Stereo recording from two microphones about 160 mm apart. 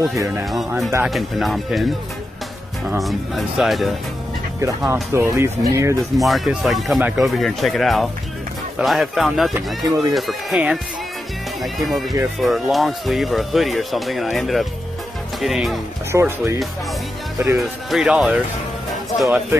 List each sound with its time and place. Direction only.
0.0 s speech: 20° right (ahead or behind)
0.5 s speech: centre (ahead or behind)
3.0 s speech: centre (ahead or behind)
4.6 s speech: 20° right (ahead or behind)
6.1 s speech: centre (ahead or behind)
16.1 s speech: 15° right (ahead or behind)
17.6 s speech: centre (ahead or behind)